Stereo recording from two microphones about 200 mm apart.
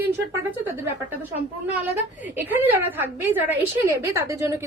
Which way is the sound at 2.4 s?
10° right (ahead or behind).